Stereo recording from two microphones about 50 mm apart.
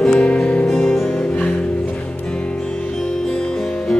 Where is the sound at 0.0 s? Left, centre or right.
Centre.